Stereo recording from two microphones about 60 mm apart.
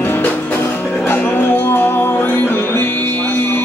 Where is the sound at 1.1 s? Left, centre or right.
Left.